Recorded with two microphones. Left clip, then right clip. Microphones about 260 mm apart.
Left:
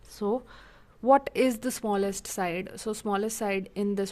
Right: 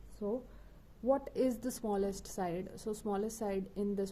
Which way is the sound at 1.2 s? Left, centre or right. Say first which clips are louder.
Left 8 dB; left.